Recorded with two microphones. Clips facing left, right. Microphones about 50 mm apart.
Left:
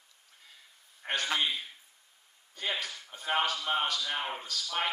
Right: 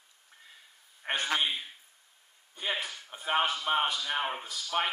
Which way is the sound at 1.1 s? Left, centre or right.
Right.